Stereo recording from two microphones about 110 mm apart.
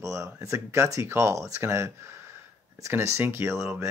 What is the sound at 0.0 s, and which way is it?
Speech, 30° right (ahead or behind).